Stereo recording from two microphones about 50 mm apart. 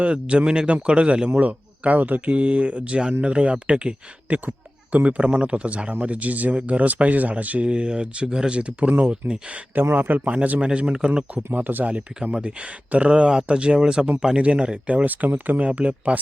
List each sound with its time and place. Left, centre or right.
0.0 s speech: right
7.7 s speech: centre
9.9 s speech: right
10.7 s speech: right
11.5 s speech: right